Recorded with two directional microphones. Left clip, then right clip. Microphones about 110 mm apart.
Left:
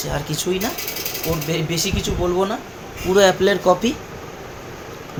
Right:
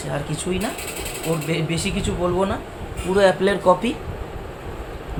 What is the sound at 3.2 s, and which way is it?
Speech, 40° left (ahead or behind).